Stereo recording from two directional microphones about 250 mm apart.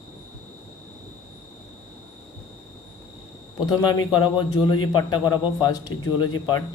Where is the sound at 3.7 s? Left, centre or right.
Centre.